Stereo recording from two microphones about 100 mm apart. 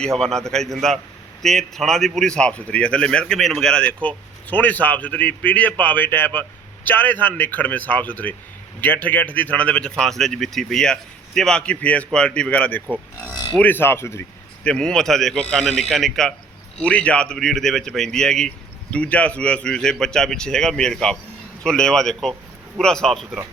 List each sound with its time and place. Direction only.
0.0 s a man's voice: 5° left (ahead or behind); by 14.3 s 25° left (ahead or behind)
14.6 s a man's voice: 10° left (ahead or behind)